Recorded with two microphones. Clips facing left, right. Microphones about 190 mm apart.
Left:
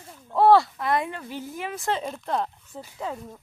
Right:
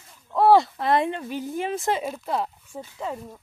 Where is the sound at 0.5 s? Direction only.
25° right (ahead or behind).